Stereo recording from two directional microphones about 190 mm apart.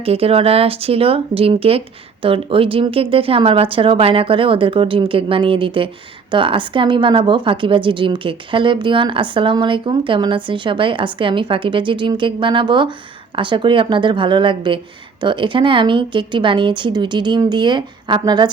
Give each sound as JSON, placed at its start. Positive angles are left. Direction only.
{"t": 0.0, "sound": "a woman's voice", "side_deg": -30}